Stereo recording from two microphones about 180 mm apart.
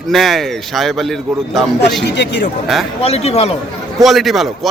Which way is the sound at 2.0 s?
70° left (ahead or behind).